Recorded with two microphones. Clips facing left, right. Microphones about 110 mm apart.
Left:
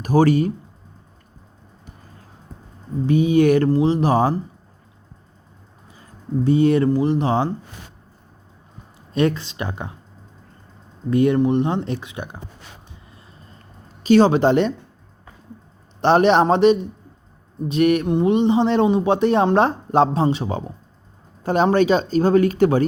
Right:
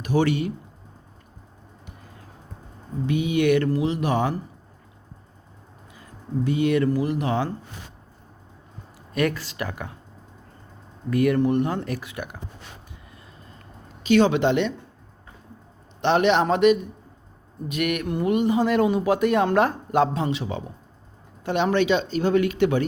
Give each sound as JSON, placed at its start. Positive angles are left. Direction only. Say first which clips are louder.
{"t": 0.0, "sound": "speech", "louder": "left 6 dB", "side_deg": 40}
{"t": 3.1, "sound": "speech", "louder": "left 5 dB", "side_deg": 35}
{"t": 5.9, "sound": "speech", "louder": "left 4 dB", "side_deg": 30}
{"t": 9.1, "sound": "a man's voice", "louder": "left 4 dB", "side_deg": 25}
{"t": 11.1, "sound": "a man's voice", "louder": "left 3 dB", "side_deg": 25}
{"t": 14.0, "sound": "speech", "louder": "left 4 dB", "side_deg": 35}
{"t": 16.0, "sound": "a man's voice", "louder": "left 5 dB", "side_deg": 40}